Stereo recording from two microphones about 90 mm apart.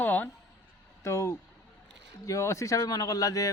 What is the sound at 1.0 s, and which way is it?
A man's voice, 30° left (ahead or behind).